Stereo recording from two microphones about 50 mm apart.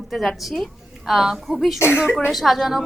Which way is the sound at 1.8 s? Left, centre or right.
Left.